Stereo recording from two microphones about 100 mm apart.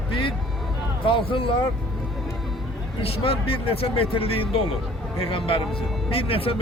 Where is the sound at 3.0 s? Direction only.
70° left (ahead or behind).